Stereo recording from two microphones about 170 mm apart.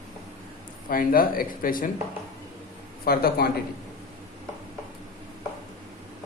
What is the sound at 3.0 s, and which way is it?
Speech, 65° left (ahead or behind).